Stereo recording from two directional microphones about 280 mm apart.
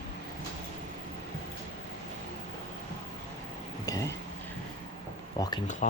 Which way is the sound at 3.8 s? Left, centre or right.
Centre.